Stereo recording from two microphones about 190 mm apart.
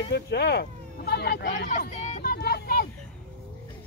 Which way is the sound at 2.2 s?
55° left (ahead or behind).